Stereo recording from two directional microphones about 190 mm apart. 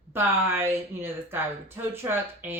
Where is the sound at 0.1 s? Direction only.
10° right (ahead or behind).